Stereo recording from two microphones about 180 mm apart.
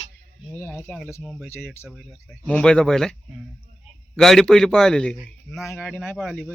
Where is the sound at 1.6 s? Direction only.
Centre (ahead or behind).